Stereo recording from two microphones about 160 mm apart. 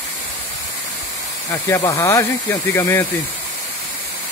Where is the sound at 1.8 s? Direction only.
20° left (ahead or behind).